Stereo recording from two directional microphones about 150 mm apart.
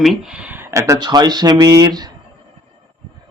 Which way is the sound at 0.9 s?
30° right (ahead or behind).